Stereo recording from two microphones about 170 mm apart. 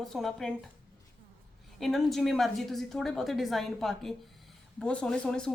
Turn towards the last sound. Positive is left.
turn(degrees=5)  # may be behind; listen again after turning